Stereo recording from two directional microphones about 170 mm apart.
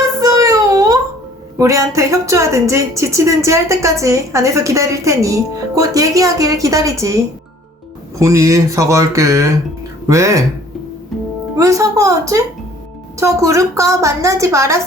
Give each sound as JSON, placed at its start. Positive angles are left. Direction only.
{"t": 0.2, "sound": "a sound", "side_deg": -20}
{"t": 1.5, "sound": "speech", "side_deg": -20}
{"t": 8.2, "sound": "speech", "side_deg": -15}
{"t": 11.5, "sound": "a woman's voice", "side_deg": -20}